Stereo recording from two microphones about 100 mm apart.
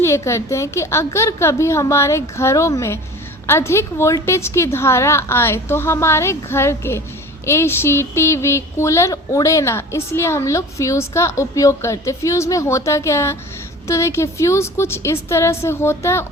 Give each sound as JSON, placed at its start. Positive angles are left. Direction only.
{"t": 0.0, "sound": "speech", "side_deg": 30}